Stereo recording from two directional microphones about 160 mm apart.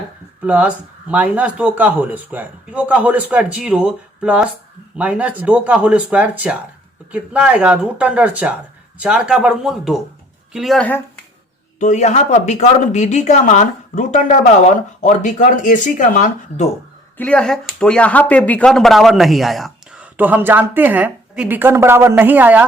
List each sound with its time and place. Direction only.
0.4 s speech: 10° right (ahead or behind)
11.8 s speech: 50° left (ahead or behind)
17.2 s speech: 5° left (ahead or behind)
20.1 s speech: 10° right (ahead or behind)